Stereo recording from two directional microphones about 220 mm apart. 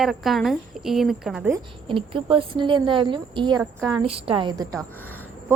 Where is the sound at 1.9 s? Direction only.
25° right (ahead or behind).